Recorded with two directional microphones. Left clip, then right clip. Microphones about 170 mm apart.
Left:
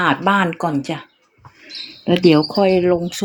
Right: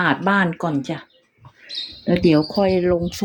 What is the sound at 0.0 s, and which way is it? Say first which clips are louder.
Speech: left 2 dB; 5° right (ahead or behind).